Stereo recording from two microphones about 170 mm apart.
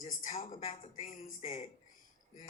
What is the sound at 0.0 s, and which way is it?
A woman's voice, 50° left (ahead or behind).